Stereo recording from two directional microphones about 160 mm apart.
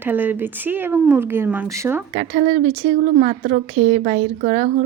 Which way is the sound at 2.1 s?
50° right (ahead or behind).